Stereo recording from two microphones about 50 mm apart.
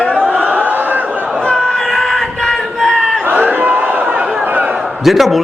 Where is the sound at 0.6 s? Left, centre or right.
Right.